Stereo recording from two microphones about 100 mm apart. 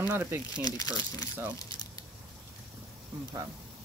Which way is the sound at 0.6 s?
40° left (ahead or behind).